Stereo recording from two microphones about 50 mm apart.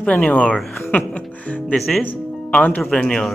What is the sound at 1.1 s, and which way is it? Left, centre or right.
Speech, left.